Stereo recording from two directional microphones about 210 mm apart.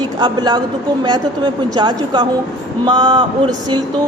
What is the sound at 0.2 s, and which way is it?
Speech, 20° right (ahead or behind).